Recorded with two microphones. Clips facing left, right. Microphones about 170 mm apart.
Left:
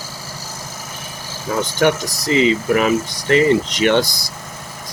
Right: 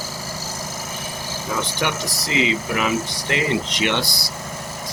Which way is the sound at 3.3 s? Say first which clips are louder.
Left 9 dB; 45° left (ahead or behind).